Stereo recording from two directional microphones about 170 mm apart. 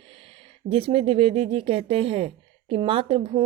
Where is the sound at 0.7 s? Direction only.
35° right (ahead or behind).